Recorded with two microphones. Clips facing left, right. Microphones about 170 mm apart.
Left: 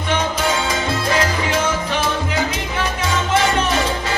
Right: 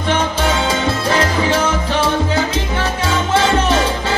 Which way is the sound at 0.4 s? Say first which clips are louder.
Right 3 dB; 30° right (ahead or behind).